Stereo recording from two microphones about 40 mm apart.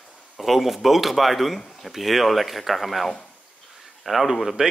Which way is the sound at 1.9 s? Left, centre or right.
Centre.